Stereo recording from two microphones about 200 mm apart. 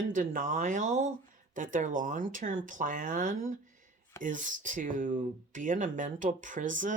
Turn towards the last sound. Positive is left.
turn(degrees=-40)  # may be behind; listen again after turning